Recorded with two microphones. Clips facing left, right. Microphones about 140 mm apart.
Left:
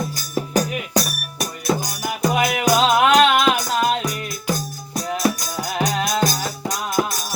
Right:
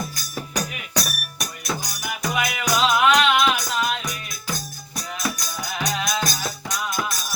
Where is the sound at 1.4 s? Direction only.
30° left (ahead or behind).